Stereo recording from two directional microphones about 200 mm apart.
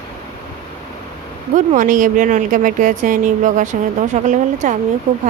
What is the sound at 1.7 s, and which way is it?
A woman's voice, 40° right (ahead or behind).